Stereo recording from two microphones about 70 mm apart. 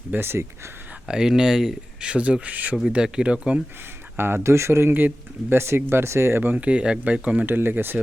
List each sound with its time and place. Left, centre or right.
0.1 s speech: right
1.0 s speech: centre
4.2 s speech: right